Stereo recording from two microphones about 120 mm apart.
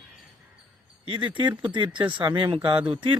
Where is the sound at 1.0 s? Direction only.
45° right (ahead or behind).